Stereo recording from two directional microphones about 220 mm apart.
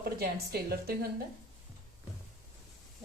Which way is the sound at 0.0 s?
45° right (ahead or behind).